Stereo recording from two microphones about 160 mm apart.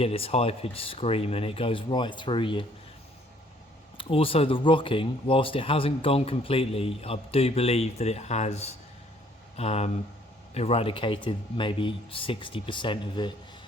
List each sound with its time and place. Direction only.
0.0 s speech: 35° left (ahead or behind)
3.9 s speech: 35° left (ahead or behind)